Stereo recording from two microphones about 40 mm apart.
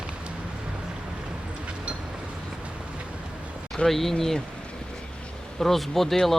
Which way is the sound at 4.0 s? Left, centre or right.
Centre.